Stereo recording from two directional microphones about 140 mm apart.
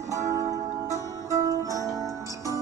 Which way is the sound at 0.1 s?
20° right (ahead or behind).